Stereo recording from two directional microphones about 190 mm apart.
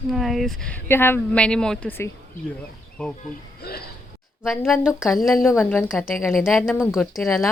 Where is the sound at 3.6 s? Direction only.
55° left (ahead or behind).